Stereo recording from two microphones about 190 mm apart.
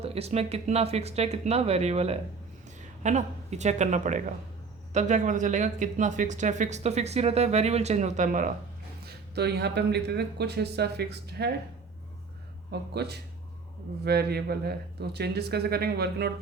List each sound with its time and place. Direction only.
0.0 s speech: 35° right (ahead or behind)
9.0 s speech: 60° right (ahead or behind)
12.9 s speech: 60° right (ahead or behind)